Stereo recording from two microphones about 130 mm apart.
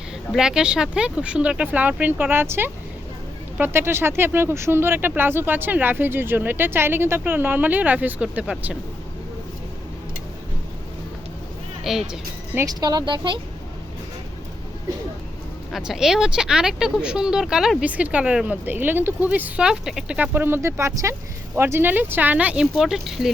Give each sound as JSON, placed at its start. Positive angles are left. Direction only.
{"t": 0.3, "sound": "speech", "side_deg": -5}
{"t": 11.8, "sound": "speech", "side_deg": 0}
{"t": 12.5, "sound": "speech", "side_deg": -30}
{"t": 15.7, "sound": "speech", "side_deg": -5}